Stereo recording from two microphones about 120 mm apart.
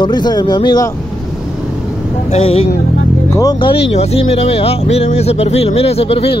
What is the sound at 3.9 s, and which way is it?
Speech, 60° left (ahead or behind).